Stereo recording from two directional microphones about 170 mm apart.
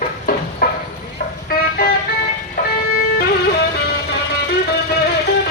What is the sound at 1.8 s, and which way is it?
Music, 65° left (ahead or behind).